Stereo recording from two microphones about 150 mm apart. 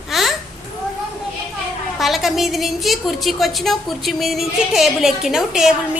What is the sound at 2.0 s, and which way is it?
A woman's voice, centre (ahead or behind).